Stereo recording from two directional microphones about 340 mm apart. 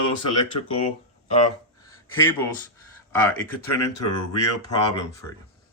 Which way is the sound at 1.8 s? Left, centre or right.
Centre.